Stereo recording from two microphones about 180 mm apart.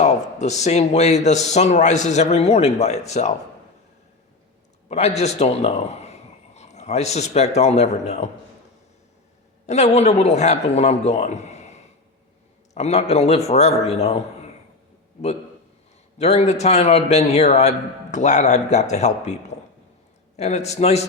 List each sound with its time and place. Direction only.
0.0 s speech: 40° left (ahead or behind)
4.9 s a man's voice: 35° left (ahead or behind)
9.6 s speech: 40° left (ahead or behind)
16.1 s speech: 40° left (ahead or behind)